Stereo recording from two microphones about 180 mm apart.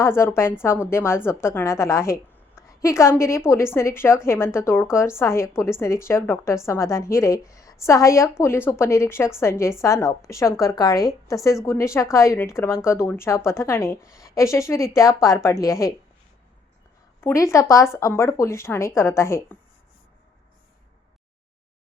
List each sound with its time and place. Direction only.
0.0 s a woman's voice: 15° left (ahead or behind)
17.2 s a woman's voice: 15° left (ahead or behind)